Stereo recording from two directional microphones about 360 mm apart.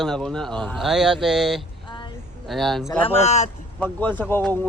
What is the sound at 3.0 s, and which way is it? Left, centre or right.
Speech, centre.